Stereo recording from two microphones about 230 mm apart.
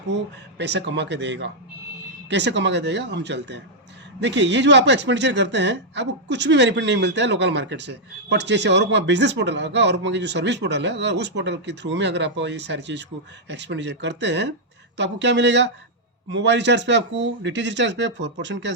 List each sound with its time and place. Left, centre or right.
0.6 s speech: right